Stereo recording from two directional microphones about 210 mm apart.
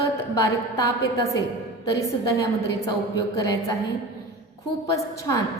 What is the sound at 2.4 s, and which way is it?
A woman's voice, 15° left (ahead or behind).